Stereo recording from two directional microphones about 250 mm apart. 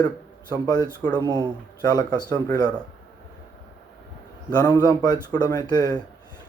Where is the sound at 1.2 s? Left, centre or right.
Centre.